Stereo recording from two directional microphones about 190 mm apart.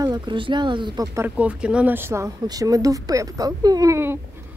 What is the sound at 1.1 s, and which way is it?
Speech, 10° right (ahead or behind).